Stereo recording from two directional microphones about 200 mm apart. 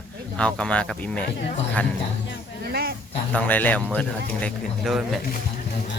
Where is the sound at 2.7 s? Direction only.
50° right (ahead or behind).